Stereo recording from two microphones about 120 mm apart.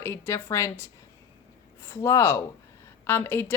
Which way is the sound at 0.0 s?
20° left (ahead or behind).